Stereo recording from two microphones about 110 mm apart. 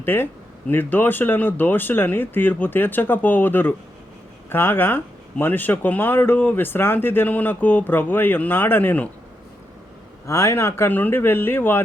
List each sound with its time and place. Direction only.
0.0 s speech: 20° left (ahead or behind)
10.2 s speech: 25° left (ahead or behind)